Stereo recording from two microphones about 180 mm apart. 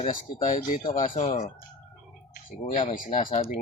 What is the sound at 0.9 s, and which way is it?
Speech, 50° left (ahead or behind).